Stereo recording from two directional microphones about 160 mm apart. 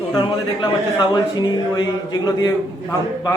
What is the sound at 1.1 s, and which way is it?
Speech, 25° left (ahead or behind).